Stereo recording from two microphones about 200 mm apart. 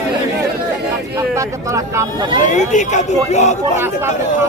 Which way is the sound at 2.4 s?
40° left (ahead or behind).